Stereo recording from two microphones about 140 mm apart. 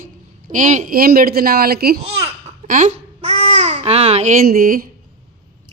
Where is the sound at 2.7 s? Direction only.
60° right (ahead or behind); by 4.8 s 90° right.